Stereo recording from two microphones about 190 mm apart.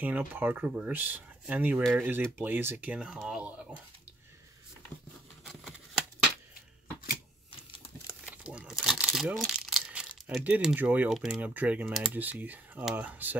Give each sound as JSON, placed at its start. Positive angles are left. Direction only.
{"t": 0.0, "sound": "speech", "side_deg": -10}
{"t": 5.5, "sound": "a sound", "side_deg": 0}
{"t": 8.3, "sound": "crumpling", "side_deg": -5}
{"t": 9.4, "sound": "speech", "side_deg": 0}